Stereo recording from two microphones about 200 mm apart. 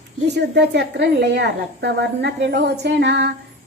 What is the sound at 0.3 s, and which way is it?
A woman's voice, 60° right (ahead or behind).